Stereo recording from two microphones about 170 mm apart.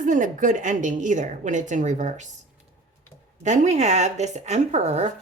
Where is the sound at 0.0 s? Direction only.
50° right (ahead or behind).